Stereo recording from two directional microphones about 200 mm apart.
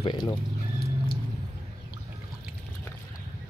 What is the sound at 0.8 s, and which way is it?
Vehicle, 50° left (ahead or behind).